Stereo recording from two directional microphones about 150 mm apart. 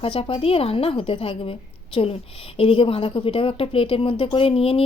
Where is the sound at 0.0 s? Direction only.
40° left (ahead or behind).